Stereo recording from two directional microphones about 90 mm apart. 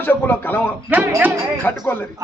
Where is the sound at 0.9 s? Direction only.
20° right (ahead or behind).